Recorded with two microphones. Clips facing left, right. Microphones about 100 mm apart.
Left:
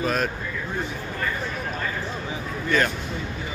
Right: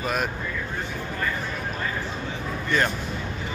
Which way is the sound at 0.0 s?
10° right (ahead or behind).